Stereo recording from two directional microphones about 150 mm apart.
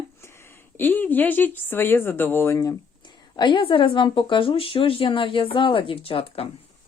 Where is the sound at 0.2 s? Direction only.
15° left (ahead or behind).